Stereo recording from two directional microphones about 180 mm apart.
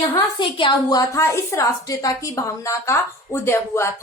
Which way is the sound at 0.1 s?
25° left (ahead or behind).